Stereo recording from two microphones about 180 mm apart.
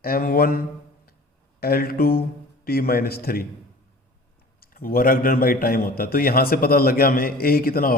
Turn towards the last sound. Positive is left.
turn(degrees=55)  # may be behind; listen again after turning